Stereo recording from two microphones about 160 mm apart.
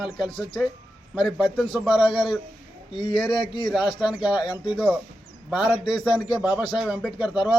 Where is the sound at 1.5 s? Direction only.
Centre (ahead or behind).